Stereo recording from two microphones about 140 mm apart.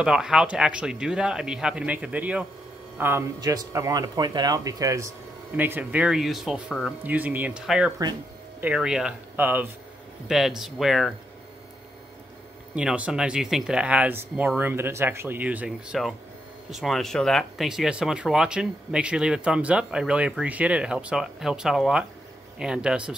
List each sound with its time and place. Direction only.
0.0 s speech: 5° right (ahead or behind); by 5.1 s 25° right (ahead or behind)
5.6 s speech: 10° right (ahead or behind)
10.2 s speech: centre (ahead or behind)
12.7 s speech: 10° right (ahead or behind)